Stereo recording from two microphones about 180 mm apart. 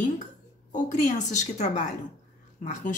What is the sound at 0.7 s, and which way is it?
Speech, 45° left (ahead or behind).